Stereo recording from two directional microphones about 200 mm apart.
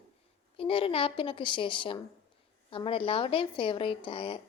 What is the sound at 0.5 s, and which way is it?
A woman's voice, 25° left (ahead or behind).